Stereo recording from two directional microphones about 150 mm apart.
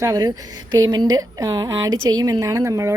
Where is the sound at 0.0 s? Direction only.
25° right (ahead or behind).